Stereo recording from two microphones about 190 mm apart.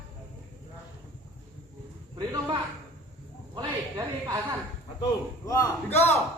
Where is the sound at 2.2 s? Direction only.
20° right (ahead or behind).